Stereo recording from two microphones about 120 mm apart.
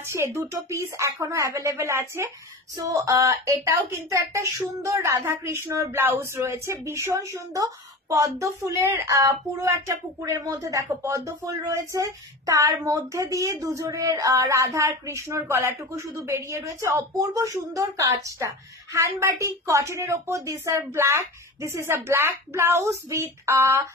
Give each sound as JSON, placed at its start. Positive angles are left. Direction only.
{"t": 0.1, "sound": "speech", "side_deg": -25}